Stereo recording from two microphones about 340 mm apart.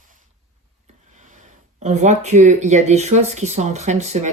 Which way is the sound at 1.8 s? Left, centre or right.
Centre.